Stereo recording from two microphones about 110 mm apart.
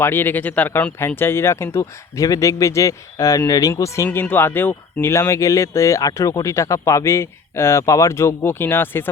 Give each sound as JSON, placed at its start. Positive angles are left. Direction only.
{"t": 0.0, "sound": "speech", "side_deg": 20}